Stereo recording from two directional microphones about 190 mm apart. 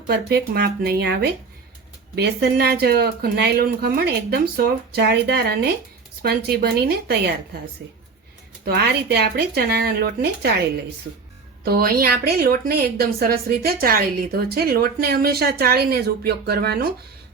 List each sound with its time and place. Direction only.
0.1 s speech: 60° right (ahead or behind)
8.6 s speech: 55° right (ahead or behind)
11.6 s a woman's voice: 50° right (ahead or behind)